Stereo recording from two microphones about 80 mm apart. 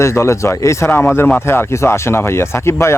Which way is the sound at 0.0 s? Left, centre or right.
Left.